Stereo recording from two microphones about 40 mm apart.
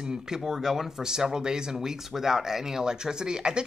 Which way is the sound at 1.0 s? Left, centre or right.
Centre.